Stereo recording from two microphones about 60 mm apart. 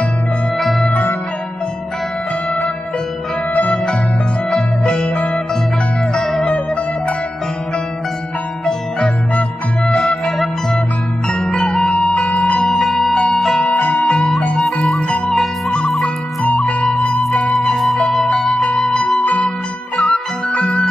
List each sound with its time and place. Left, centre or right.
0.6 s music: centre
0.8 s music: left
4.5 s music: centre
6.1 s music: centre
8.6 s music: centre
10.2 s music: centre; by 12.7 s left
12.7 s music: centre
13.7 s music: left
14.5 s music: centre
16.9 s music: centre
19.2 s music: left